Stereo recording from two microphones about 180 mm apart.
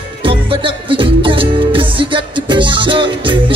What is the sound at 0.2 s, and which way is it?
Music, 30° right (ahead or behind).